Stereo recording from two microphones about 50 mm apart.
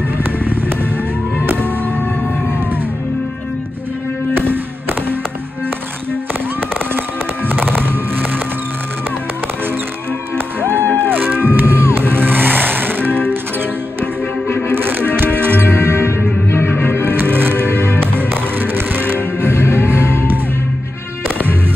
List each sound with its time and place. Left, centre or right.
0.2 s fireworks: right
1.4 s music: right
7.4 s music: right
10.3 s music: right
14.8 s music: right
16.4 s music: left
17.0 s music: right
20.0 s music: left